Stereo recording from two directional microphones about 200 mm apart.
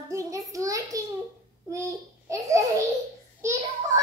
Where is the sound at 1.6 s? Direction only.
15° right (ahead or behind).